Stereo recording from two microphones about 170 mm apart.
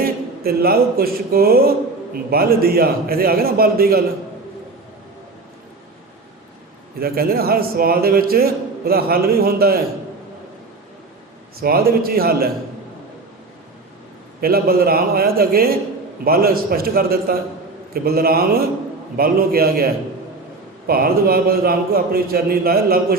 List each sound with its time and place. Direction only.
0.0 s a man's voice: 65° right (ahead or behind)
7.0 s a man's voice: 60° right (ahead or behind)
11.6 s a man's voice: 60° right (ahead or behind)
14.4 s a man's voice: 60° right (ahead or behind)